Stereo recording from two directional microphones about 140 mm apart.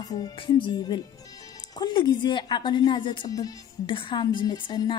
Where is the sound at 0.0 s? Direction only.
30° left (ahead or behind).